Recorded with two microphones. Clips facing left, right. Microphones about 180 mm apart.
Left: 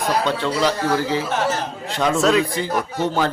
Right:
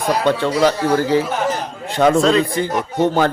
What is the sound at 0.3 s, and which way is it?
Speech, 50° right (ahead or behind).